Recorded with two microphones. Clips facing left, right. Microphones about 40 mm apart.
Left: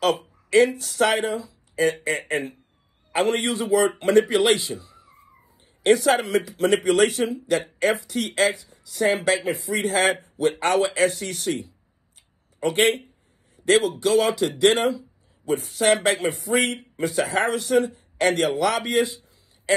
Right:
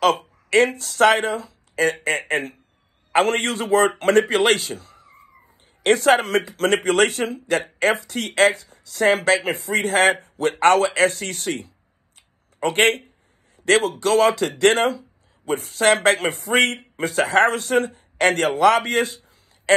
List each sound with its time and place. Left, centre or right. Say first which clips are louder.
0.0 s speech: right 4 dB; right
4.6 s a sound: even; right
5.9 s speech: right 2 dB; right